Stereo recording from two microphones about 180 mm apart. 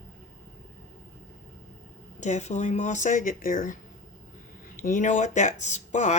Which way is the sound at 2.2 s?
40° left (ahead or behind).